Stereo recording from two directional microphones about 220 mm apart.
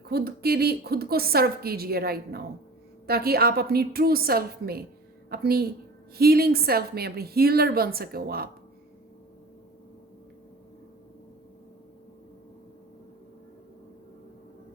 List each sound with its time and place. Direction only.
0.1 s a woman's voice: 45° right (ahead or behind)